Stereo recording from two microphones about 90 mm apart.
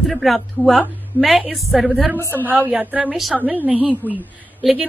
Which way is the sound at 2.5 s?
20° right (ahead or behind).